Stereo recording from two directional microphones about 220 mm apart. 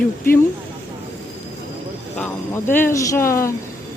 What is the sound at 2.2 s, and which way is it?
Speech, 10° left (ahead or behind).